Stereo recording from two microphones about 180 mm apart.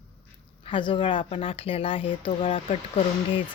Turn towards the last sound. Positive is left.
turn(degrees=30)  # may be behind; listen again after turning